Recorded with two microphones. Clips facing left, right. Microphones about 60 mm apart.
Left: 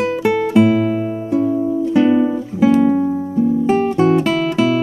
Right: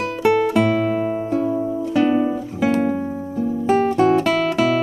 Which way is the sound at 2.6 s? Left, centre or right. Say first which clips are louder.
Left 6 dB; right.